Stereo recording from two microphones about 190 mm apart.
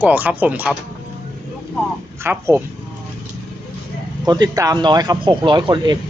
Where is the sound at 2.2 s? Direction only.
10° right (ahead or behind).